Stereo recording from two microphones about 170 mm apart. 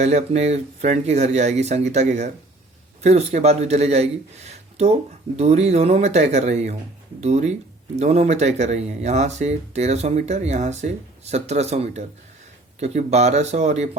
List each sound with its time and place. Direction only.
0.0 s speech: 40° right (ahead or behind)